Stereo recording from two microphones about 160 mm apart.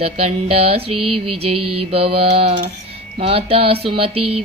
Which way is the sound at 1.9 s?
35° right (ahead or behind).